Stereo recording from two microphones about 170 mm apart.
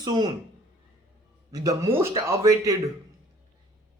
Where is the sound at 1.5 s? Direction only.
20° right (ahead or behind).